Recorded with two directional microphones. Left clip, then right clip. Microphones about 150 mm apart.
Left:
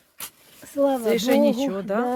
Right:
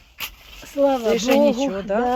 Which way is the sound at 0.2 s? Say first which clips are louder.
Right 9 dB; 25° left (ahead or behind).